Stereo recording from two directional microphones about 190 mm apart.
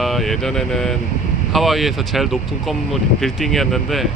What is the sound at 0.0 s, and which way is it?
Speech, centre (ahead or behind).